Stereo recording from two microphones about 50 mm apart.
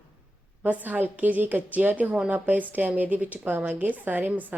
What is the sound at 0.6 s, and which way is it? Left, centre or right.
Speech, right.